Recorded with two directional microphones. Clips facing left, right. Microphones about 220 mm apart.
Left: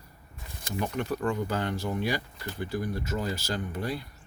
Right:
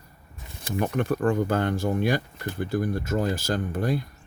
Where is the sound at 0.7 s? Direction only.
50° right (ahead or behind).